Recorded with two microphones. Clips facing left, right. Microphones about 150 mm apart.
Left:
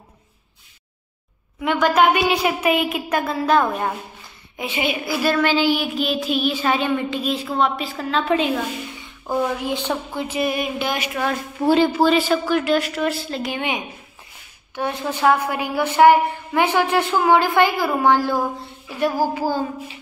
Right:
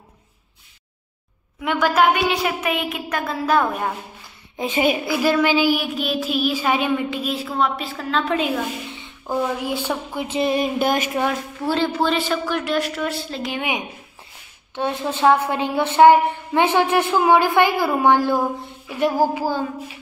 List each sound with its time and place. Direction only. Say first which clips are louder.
1.6 s child singing: left 1 dB; centre (ahead or behind)
2.4 s a woman's voice: left 4 dB; 10° left (ahead or behind)
3.4 s child singing: even; 5° right (ahead or behind)
4.6 s a woman's voice: right 4 dB; 40° right (ahead or behind)
5.0 s child singing: right 1 dB; 15° right (ahead or behind); by 8.6 s centre (ahead or behind)
9.3 s speech: left 1 dB; 10° left (ahead or behind)
9.7 s speech: left 1 dB; 10° right (ahead or behind)
10.2 s a woman's voice: right 3 dB; 25° right (ahead or behind)
10.8 s speech: right 4 dB; 45° right (ahead or behind)
11.6 s child singing: left 5 dB; 10° left (ahead or behind)
14.8 s a woman's voice: right 1 dB; 20° right (ahead or behind)